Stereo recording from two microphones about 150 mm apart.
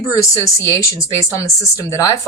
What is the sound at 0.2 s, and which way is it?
Speech, 20° left (ahead or behind).